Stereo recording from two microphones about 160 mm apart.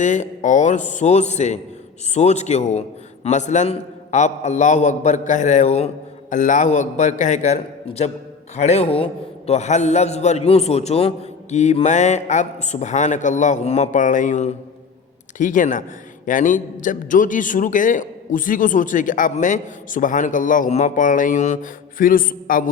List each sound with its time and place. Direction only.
0.0 s a man's voice: 50° left (ahead or behind)